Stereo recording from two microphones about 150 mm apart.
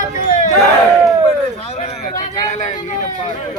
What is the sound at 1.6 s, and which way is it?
Speech, 45° left (ahead or behind).